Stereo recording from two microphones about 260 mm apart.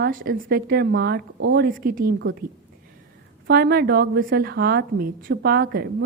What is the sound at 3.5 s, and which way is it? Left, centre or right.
A woman's voice, right.